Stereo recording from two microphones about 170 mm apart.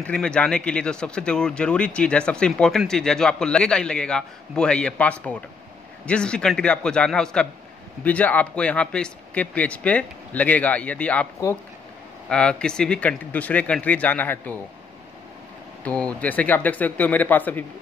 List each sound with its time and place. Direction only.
0.0 s speech: 5° left (ahead or behind)
15.8 s speech: 5° left (ahead or behind)